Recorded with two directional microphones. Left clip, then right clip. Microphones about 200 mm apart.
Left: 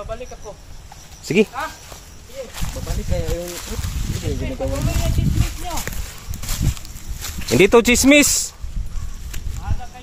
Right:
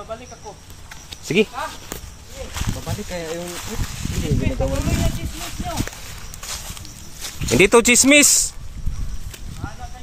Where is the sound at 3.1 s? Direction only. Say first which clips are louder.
Left 3 dB; 55° right (ahead or behind).